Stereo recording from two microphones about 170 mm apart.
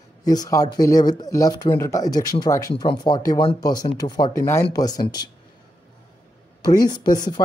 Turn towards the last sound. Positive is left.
turn(degrees=25)  # may be behind; listen again after turning